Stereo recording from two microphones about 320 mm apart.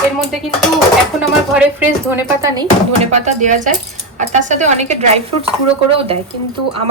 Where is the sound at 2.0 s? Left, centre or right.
Centre.